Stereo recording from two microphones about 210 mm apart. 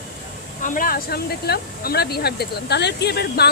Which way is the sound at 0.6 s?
40° left (ahead or behind).